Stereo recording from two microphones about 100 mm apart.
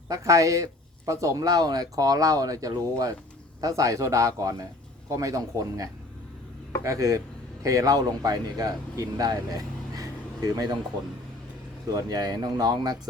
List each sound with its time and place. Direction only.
0.1 s speech: 35° right (ahead or behind)
11.9 s speech: 40° right (ahead or behind)